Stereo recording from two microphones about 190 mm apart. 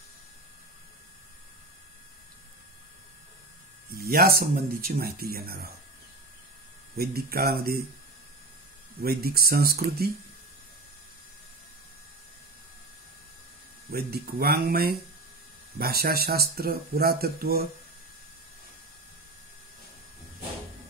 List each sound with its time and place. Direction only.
3.9 s speech: 50° right (ahead or behind)
7.0 s speech: 55° right (ahead or behind)
9.0 s speech: 55° right (ahead or behind)
13.8 s speech: 55° right (ahead or behind)